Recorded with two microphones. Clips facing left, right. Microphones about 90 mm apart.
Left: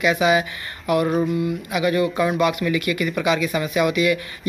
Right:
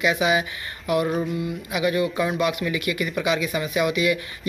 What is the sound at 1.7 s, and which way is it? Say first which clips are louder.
Speech: left 1 dB; 15° right (ahead or behind).